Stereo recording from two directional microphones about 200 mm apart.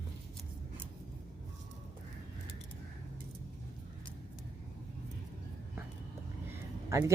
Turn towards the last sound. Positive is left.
turn(degrees=-15)  # may be behind; listen again after turning